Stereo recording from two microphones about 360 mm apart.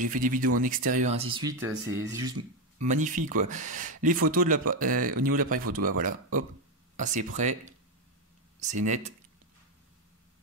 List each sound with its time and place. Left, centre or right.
0.0 s speech: right
2.8 s speech: centre